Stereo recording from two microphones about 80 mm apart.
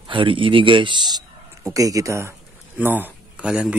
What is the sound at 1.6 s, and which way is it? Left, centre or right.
Speech, right.